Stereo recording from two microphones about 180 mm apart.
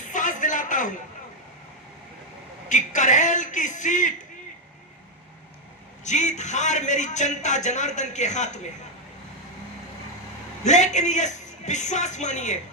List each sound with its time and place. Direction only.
0.0 s a sound: 45° left (ahead or behind)
2.6 s speech: 45° left (ahead or behind)
6.1 s a man's voice: 40° left (ahead or behind)
10.6 s speech: 40° left (ahead or behind)